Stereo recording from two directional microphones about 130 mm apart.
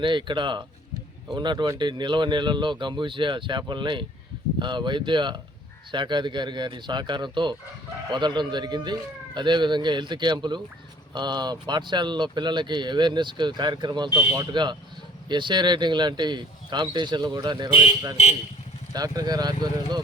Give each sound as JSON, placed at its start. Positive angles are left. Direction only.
{"t": 0.0, "sound": "speech", "side_deg": -40}
{"t": 18.9, "sound": "speech", "side_deg": -30}